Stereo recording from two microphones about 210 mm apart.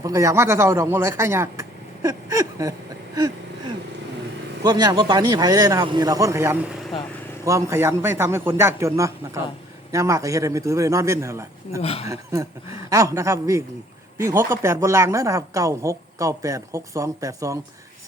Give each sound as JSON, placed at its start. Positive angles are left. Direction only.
{"t": 0.0, "sound": "a man's voice", "side_deg": -15}
{"t": 4.6, "sound": "a woman's voice", "side_deg": -20}
{"t": 11.8, "sound": "speech", "side_deg": 30}
{"t": 12.0, "sound": "a woman's voice", "side_deg": -15}